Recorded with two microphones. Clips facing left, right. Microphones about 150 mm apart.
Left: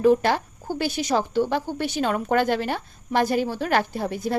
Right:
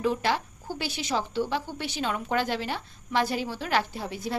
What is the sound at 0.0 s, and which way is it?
Speech, 50° left (ahead or behind).